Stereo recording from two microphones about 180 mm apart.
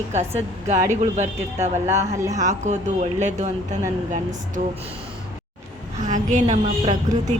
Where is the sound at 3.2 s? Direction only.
40° right (ahead or behind).